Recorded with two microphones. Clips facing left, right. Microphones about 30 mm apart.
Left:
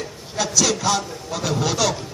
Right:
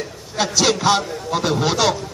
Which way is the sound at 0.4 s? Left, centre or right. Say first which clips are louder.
Right 3 dB; right.